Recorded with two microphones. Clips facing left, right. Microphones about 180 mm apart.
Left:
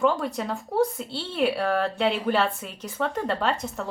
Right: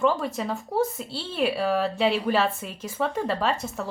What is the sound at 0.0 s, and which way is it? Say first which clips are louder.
Speech: even; centre (ahead or behind).